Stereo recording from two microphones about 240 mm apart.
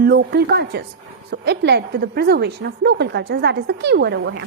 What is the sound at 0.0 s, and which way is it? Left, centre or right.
A woman's voice, right.